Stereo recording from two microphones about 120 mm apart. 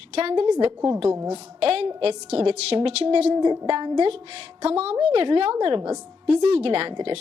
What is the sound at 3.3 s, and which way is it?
Speech, 35° right (ahead or behind).